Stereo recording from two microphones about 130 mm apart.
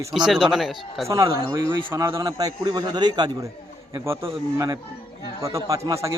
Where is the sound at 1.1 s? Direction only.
25° right (ahead or behind).